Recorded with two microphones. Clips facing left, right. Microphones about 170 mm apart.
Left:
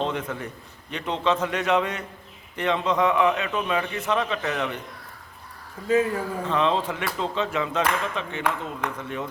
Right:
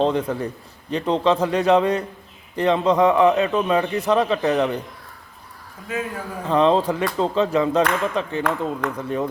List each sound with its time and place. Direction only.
0.0 s speech: 35° right (ahead or behind)
6.4 s speech: 35° right (ahead or behind)